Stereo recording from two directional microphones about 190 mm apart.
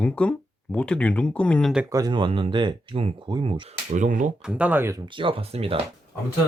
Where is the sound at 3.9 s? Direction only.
40° right (ahead or behind).